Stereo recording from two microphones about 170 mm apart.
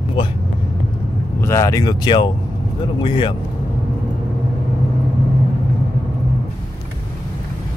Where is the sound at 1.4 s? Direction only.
15° left (ahead or behind).